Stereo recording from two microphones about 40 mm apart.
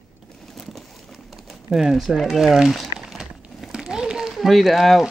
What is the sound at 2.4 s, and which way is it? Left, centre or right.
Speech, centre.